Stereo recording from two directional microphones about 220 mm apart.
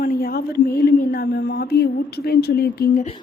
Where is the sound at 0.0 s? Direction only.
40° left (ahead or behind).